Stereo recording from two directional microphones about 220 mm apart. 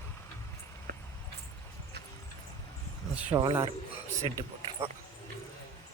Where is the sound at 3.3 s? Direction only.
20° right (ahead or behind).